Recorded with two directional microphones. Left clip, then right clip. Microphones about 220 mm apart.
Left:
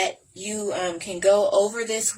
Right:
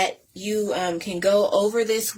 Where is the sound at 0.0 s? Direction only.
55° right (ahead or behind).